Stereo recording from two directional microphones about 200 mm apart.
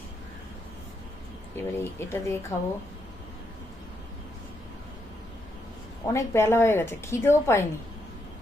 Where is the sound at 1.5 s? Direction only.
10° left (ahead or behind).